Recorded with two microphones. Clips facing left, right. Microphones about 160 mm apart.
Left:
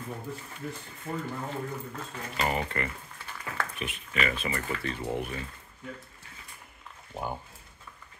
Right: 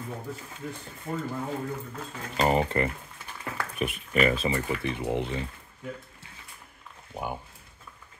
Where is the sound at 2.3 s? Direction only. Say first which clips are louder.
Right 6 dB; 35° right (ahead or behind).